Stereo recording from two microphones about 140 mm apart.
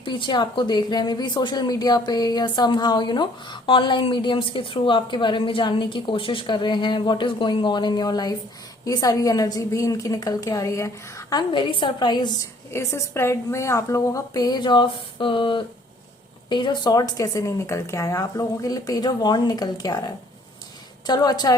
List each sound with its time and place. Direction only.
0.0 s a woman's voice: 35° left (ahead or behind)
12.7 s a woman's voice: 20° left (ahead or behind)
21.1 s a woman's voice: 30° left (ahead or behind)